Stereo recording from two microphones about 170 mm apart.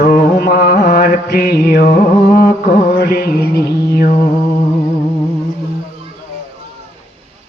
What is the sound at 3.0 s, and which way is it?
Mantra, 65° left (ahead or behind).